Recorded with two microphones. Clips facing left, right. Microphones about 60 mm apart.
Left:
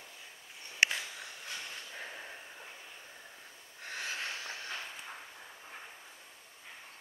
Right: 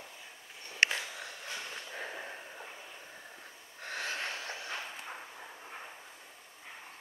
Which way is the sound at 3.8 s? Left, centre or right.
Centre.